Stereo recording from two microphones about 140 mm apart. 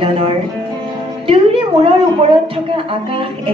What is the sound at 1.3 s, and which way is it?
A woman's voice, 40° right (ahead or behind).